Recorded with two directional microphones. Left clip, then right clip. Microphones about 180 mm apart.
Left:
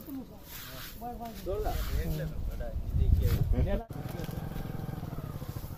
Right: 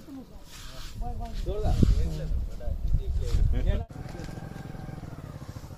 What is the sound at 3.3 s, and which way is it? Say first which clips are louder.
Speech: left 2 dB; 10° left (ahead or behind).